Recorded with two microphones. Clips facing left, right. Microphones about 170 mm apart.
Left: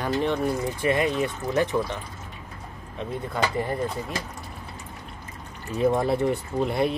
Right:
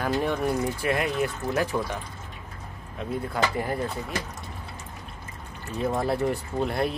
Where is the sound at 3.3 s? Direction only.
5° right (ahead or behind).